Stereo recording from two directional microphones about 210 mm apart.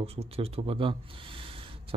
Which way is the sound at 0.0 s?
30° right (ahead or behind).